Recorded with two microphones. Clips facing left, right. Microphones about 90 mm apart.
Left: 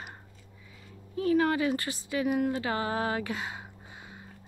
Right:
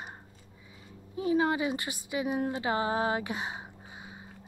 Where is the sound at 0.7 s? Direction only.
20° right (ahead or behind).